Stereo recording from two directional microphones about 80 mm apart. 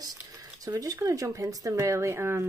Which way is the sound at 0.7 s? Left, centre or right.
Right.